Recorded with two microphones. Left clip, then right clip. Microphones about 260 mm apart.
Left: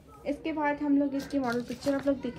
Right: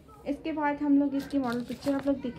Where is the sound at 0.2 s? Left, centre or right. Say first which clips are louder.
Even; centre.